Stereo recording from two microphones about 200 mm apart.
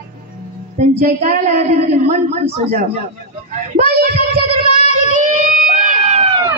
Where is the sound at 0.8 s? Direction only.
35° right (ahead or behind).